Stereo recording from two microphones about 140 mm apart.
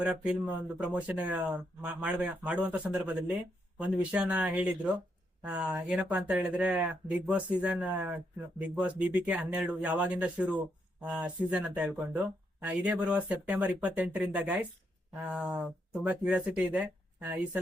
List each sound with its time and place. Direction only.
0.0 s speech: 10° right (ahead or behind)